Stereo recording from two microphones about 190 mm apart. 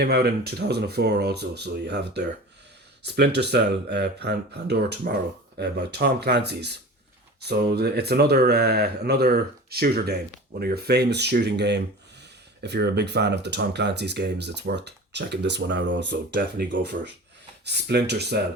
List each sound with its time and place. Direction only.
0.0 s speech: 55° right (ahead or behind)